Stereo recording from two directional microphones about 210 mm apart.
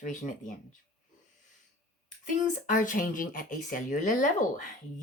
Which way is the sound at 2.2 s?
40° left (ahead or behind).